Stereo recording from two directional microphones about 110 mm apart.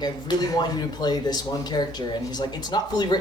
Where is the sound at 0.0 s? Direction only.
40° left (ahead or behind).